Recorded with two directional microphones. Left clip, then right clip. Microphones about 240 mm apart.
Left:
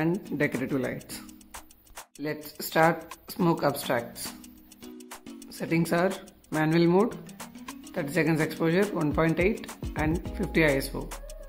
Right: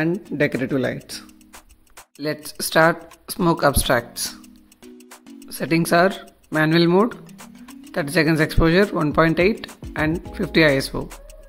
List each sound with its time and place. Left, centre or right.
0.0 s speech: centre
2.2 s speech: centre
4.9 s music: centre
5.5 s speech: centre